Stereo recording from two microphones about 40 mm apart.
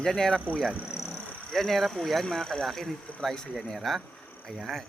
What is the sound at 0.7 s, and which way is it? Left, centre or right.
Speech, right.